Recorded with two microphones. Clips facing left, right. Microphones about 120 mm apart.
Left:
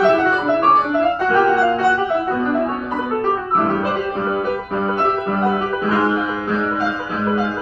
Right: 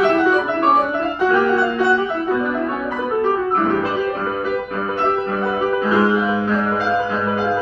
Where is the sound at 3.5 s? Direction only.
15° left (ahead or behind).